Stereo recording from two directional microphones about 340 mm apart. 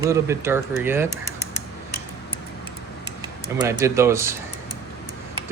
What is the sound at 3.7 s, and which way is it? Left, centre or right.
Speech, centre.